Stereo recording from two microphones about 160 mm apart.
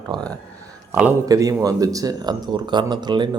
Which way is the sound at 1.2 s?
20° right (ahead or behind).